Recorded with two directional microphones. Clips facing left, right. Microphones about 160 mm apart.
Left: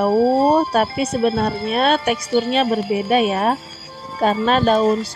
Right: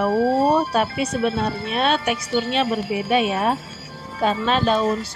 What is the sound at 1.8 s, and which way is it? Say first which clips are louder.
Speech: left 3 dB; 45° left (ahead or behind).